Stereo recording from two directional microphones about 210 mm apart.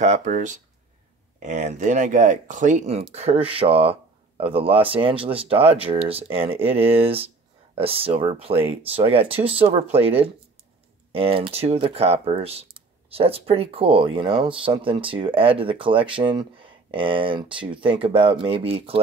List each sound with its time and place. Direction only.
0.0 s speech: 35° right (ahead or behind)